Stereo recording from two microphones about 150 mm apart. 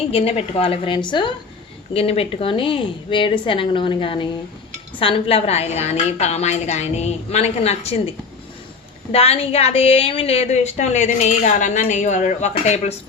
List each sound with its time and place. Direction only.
0.1 s a woman's voice: 40° left (ahead or behind)
9.1 s a woman's voice: 40° left (ahead or behind)